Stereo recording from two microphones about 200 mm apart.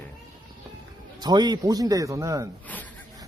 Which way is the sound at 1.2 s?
20° right (ahead or behind).